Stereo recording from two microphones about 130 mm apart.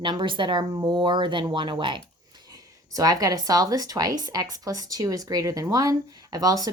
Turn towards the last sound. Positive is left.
turn(degrees=-30)  # may be behind; listen again after turning